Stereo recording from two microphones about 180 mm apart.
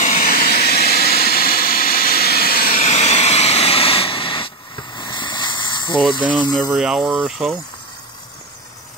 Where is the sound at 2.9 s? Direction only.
40° left (ahead or behind).